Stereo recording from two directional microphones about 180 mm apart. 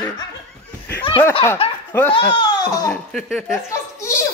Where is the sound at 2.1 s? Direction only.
25° left (ahead or behind).